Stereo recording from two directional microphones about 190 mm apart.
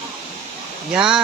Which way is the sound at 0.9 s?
5° right (ahead or behind).